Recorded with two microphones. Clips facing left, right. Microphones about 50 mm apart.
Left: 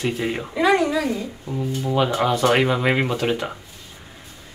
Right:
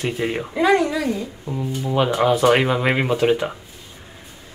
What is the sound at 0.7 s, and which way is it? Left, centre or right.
A child's voice, centre.